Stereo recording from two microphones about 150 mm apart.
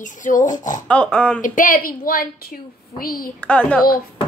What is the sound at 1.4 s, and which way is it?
A woman's voice, 60° left (ahead or behind).